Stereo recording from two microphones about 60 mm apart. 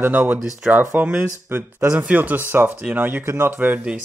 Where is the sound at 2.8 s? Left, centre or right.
Right.